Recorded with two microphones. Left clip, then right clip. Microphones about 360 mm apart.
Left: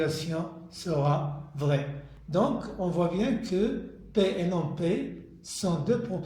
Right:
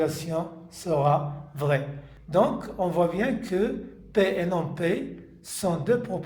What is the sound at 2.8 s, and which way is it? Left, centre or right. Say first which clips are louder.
Speech: right 4 dB; right.